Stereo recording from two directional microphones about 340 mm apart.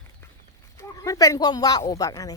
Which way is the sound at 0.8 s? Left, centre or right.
Centre.